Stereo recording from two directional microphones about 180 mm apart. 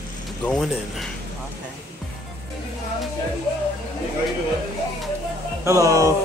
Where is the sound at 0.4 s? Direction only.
5° left (ahead or behind).